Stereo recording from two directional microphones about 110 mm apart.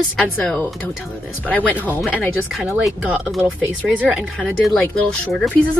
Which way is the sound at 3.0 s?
5° right (ahead or behind).